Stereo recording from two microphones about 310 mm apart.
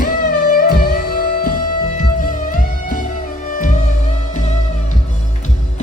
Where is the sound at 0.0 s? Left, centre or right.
Left.